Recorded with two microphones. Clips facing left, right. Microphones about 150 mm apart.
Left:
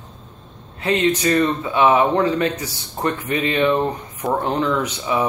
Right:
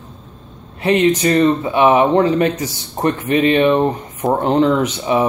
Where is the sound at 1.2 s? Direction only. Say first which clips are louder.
Right 4 dB; 20° right (ahead or behind).